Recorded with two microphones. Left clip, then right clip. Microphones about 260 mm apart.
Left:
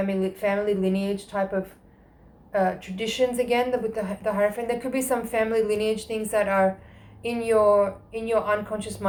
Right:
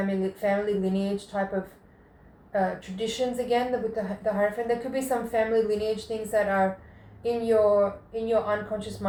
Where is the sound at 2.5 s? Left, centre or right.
Left.